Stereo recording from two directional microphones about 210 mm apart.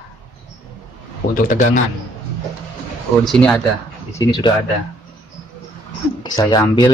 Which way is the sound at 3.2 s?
5° left (ahead or behind).